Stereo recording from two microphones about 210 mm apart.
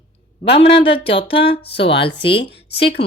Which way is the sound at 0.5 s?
25° left (ahead or behind).